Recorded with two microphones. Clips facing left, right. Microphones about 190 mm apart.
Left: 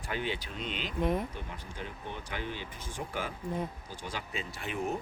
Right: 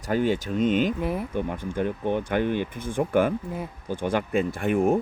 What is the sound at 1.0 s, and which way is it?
Speech, 5° right (ahead or behind).